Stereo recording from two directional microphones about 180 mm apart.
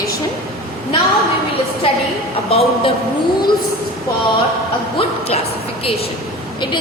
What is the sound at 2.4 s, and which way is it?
Speech, 35° left (ahead or behind).